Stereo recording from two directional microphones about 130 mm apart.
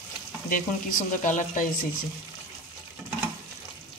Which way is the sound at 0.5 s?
85° left.